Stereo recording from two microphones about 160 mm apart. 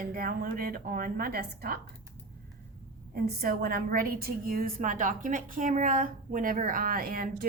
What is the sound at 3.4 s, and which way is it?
A woman's voice, 65° right (ahead or behind).